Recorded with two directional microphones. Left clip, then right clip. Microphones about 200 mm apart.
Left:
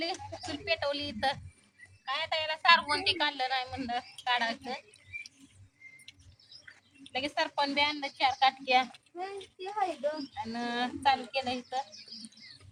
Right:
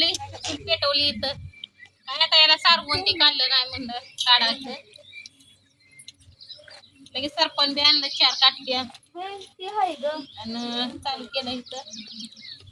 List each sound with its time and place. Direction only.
0.0 s a sound: 5° left (ahead or behind)
2.0 s a woman's voice: 5° left (ahead or behind)
7.0 s a woman's voice: 5° left (ahead or behind)
9.7 s a child's voice: 35° right (ahead or behind)
10.3 s a woman's voice: 5° left (ahead or behind)